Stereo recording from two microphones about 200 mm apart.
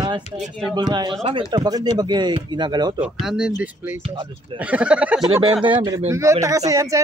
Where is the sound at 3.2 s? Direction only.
5° right (ahead or behind).